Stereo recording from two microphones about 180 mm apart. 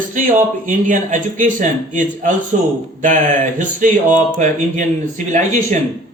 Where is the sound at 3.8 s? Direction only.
45° right (ahead or behind).